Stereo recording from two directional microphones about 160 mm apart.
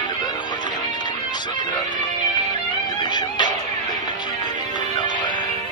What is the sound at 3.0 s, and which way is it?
Music, 25° left (ahead or behind).